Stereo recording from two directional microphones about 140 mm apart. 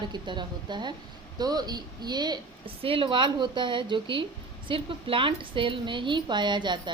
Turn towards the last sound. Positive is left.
turn(degrees=-35)  # may be behind; listen again after turning